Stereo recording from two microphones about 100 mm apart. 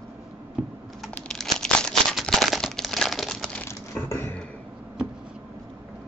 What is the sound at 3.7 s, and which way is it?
Coin, 25° left (ahead or behind).